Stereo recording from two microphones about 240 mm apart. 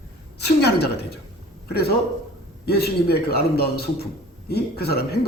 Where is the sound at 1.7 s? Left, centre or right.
Left.